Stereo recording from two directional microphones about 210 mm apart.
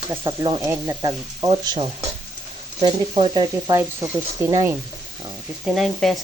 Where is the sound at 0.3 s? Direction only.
20° right (ahead or behind).